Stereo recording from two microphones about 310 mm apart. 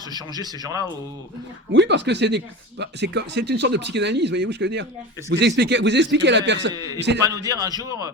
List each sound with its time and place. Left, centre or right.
0.1 s a man's voice: centre
1.8 s speech: right
6.7 s a man's voice: centre